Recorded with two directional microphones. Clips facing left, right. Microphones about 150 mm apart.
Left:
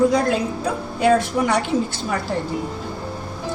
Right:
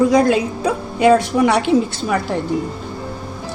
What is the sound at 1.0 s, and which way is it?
Speech, 90° right.